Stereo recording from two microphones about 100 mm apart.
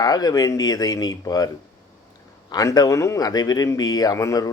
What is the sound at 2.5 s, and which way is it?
Speech, 40° left (ahead or behind).